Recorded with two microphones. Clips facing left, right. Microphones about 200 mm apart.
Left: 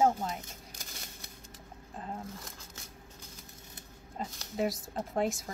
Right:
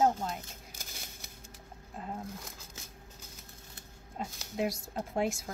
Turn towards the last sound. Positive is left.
turn(degrees=0)  # may be behind; listen again after turning